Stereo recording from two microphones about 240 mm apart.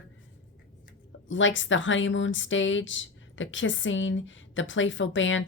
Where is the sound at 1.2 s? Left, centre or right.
Left.